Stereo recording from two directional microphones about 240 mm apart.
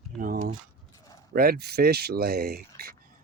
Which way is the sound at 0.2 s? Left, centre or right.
Right.